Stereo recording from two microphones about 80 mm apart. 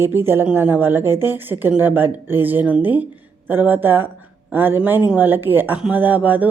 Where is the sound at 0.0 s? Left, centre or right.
Right.